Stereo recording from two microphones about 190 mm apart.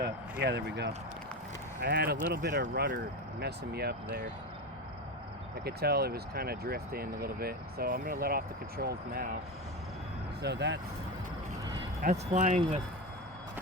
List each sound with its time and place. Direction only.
0.0 s speech: 60° right (ahead or behind)
5.6 s speech: 55° right (ahead or behind)
10.4 s speech: 65° right (ahead or behind)
12.0 s speech: 35° right (ahead or behind)